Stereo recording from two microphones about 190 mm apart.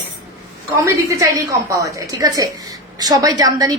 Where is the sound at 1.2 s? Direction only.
15° right (ahead or behind).